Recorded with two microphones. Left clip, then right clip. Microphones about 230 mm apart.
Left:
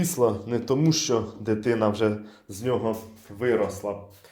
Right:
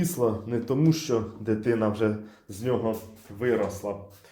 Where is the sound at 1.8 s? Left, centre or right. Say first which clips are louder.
Left 2 dB; centre.